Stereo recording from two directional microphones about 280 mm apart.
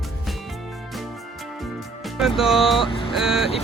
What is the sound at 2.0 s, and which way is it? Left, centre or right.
Speech, centre.